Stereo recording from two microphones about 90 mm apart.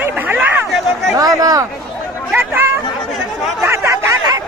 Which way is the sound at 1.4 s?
45° right (ahead or behind).